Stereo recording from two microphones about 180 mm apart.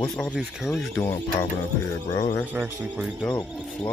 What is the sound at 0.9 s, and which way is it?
Speech, 15° left (ahead or behind).